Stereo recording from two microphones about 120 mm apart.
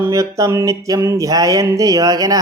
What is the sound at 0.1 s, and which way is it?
Speech, 25° right (ahead or behind).